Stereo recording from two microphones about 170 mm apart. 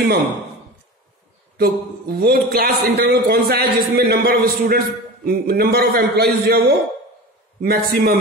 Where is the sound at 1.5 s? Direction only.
65° right (ahead or behind).